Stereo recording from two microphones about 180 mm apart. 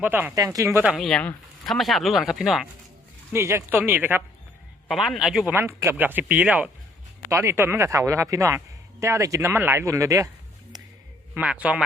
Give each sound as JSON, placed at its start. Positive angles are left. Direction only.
{"t": 0.0, "sound": "speech", "side_deg": -10}
{"t": 0.9, "sound": "speech", "side_deg": 0}
{"t": 3.3, "sound": "speech", "side_deg": -15}
{"t": 4.9, "sound": "speech", "side_deg": 0}
{"t": 5.5, "sound": "speech", "side_deg": -15}
{"t": 11.3, "sound": "speech", "side_deg": -5}